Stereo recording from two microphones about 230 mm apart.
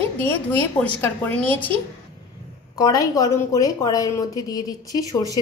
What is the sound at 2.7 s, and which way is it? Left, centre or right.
A woman's voice, centre.